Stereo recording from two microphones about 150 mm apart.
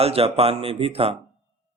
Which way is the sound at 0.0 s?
40° right (ahead or behind).